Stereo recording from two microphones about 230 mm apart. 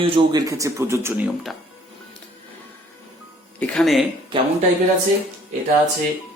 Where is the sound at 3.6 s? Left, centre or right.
Centre.